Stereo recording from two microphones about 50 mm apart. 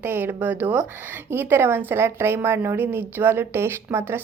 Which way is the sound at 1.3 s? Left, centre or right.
Right.